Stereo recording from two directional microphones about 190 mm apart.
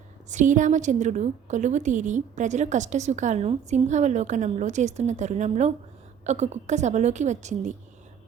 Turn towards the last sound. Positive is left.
turn(degrees=-40)  # may be behind; listen again after turning